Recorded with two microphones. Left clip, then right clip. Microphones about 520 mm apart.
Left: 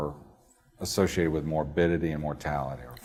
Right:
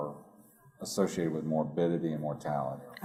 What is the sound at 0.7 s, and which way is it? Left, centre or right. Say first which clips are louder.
Speech: left 5 dB; left.